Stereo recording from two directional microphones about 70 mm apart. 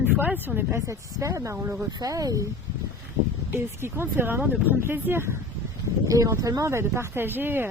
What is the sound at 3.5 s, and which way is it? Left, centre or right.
Speech, right.